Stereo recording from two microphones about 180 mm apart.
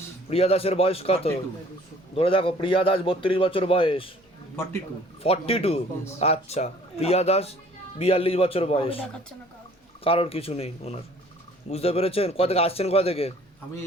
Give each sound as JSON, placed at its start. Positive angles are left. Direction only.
{"t": 0.3, "sound": "a man's voice", "side_deg": 35}
{"t": 5.2, "sound": "speech", "side_deg": 35}